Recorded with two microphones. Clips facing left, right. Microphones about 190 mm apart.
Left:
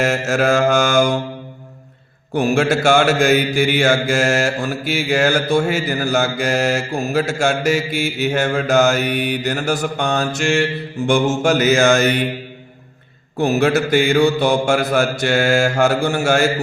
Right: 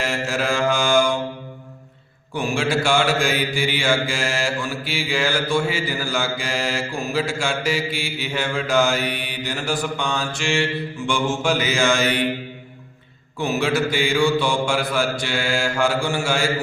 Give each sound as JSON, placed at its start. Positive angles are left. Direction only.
{"t": 0.0, "sound": "mantra", "side_deg": 45}
{"t": 2.6, "sound": "mantra", "side_deg": 45}
{"t": 13.4, "sound": "mantra", "side_deg": 45}